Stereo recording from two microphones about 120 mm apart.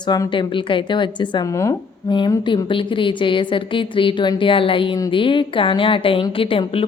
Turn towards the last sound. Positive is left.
turn(degrees=50)  # may be behind; listen again after turning